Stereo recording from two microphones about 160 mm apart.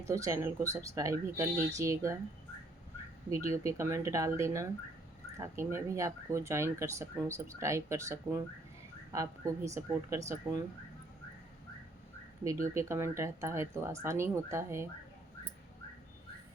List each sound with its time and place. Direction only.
0.1 s speech: 20° right (ahead or behind)
3.2 s speech: 20° right (ahead or behind)
12.7 s speech: 15° right (ahead or behind)